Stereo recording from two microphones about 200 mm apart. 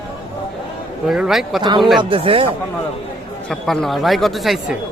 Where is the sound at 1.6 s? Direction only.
20° right (ahead or behind).